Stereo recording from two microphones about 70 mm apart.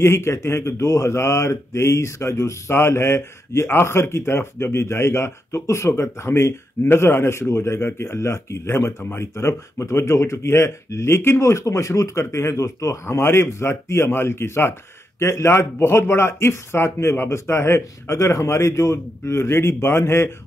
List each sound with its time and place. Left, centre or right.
0.0 s speech: left